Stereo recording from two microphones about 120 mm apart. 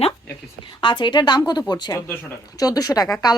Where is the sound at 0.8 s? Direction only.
40° left (ahead or behind).